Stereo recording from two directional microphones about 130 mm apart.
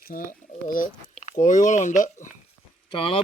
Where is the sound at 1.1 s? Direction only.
65° left (ahead or behind).